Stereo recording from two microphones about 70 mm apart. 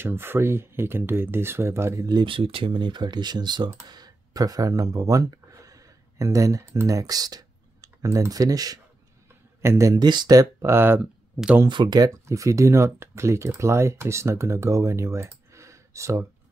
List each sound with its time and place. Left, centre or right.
0.0 s speech: right
2.0 s speech: right
2.8 s speech: right
9.6 s speech: right
9.9 s speech: right
10.6 s speech: right
11.6 s speech: right
12.3 s speech: right